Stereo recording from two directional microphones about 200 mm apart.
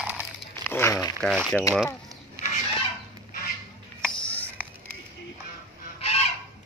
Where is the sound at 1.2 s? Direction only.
Centre (ahead or behind).